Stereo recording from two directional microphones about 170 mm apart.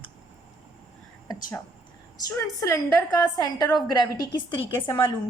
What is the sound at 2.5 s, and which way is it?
A woman's voice, 20° left (ahead or behind).